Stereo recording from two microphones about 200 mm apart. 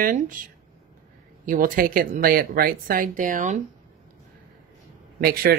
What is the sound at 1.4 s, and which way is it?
Speech, 45° right (ahead or behind).